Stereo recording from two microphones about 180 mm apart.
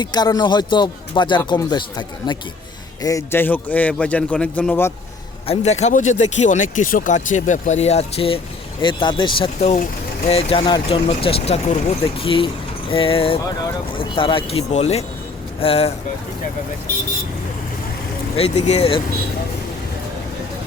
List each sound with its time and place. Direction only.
0.0 s a man's voice: 25° left (ahead or behind)
5.5 s speech: 40° left (ahead or behind)
18.3 s speech: 35° left (ahead or behind)